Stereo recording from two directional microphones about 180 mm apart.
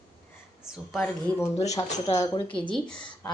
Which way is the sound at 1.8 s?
40° left (ahead or behind).